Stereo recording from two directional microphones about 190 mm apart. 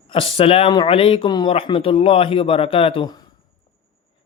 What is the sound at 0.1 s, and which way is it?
Speech, 25° left (ahead or behind).